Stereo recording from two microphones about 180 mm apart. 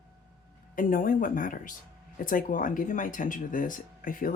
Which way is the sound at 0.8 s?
50° left (ahead or behind).